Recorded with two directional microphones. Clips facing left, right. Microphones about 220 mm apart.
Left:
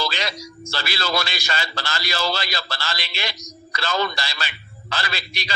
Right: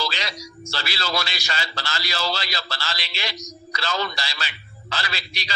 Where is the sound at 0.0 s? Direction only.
50° left (ahead or behind).